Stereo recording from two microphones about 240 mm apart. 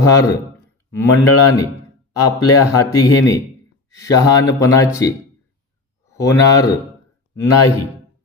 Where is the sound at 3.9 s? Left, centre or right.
Centre.